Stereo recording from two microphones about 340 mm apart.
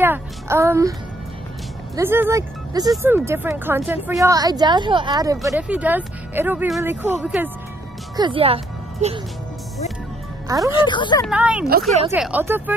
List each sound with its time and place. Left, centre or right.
0.0 s a woman's voice: centre
2.0 s a woman's voice: centre
8.2 s a woman's voice: centre
10.8 s speech: centre
11.2 s speech: centre